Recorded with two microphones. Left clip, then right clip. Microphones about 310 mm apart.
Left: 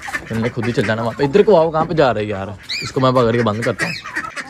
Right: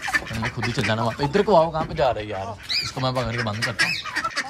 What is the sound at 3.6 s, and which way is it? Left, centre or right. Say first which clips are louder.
Speech: left 3 dB; centre.